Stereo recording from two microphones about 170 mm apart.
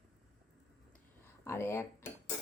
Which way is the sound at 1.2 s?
15° left (ahead or behind).